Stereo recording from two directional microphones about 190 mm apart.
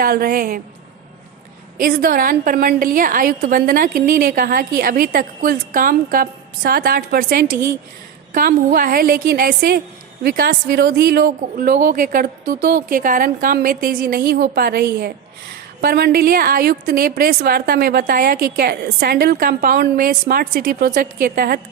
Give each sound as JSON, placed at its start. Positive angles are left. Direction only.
{"t": 0.0, "sound": "a woman's voice", "side_deg": -50}
{"t": 1.8, "sound": "a woman's voice", "side_deg": -50}